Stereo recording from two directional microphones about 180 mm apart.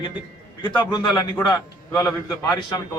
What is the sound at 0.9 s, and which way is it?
A man's voice, 25° left (ahead or behind).